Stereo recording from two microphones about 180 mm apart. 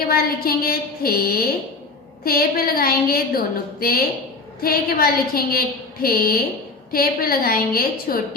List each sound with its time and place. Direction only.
0.1 s a woman's voice: 60° left (ahead or behind)